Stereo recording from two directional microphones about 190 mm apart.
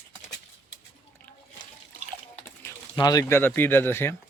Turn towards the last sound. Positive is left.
turn(degrees=10)  # may be behind; listen again after turning